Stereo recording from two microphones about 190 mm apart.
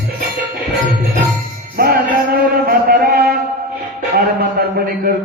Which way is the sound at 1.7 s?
55° right (ahead or behind).